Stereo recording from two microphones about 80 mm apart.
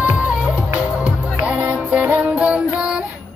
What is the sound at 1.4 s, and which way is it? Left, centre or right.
Music, centre.